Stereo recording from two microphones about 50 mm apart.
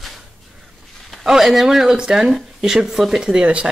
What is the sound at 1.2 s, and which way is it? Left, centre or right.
Speech, centre.